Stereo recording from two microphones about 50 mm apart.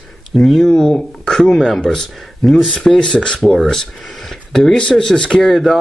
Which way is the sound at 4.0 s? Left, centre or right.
Centre.